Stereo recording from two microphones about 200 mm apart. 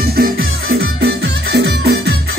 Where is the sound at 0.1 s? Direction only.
50° right (ahead or behind).